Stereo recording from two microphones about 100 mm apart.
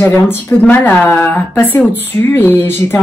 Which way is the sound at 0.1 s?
15° left (ahead or behind).